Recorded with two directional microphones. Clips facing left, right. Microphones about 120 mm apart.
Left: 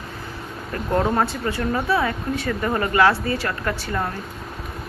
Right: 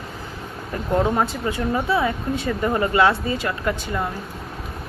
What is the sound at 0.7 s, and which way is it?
Speech, 15° right (ahead or behind).